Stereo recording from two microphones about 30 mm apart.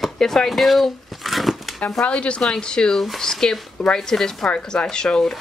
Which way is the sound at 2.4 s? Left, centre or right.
Left.